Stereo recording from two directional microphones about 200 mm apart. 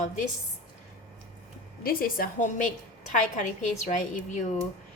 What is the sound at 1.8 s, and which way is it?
A woman's voice, 45° left (ahead or behind).